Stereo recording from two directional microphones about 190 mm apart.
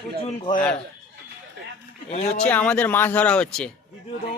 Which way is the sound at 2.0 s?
35° left (ahead or behind).